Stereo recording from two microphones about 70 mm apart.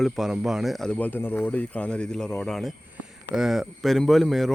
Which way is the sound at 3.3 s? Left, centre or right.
Centre.